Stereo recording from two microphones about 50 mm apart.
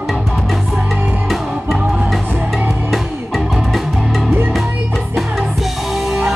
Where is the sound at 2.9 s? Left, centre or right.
Centre.